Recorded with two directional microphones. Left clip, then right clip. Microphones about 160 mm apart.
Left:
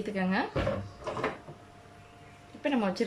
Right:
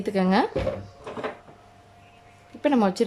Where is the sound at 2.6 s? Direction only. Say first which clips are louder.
Right 8 dB; 30° right (ahead or behind).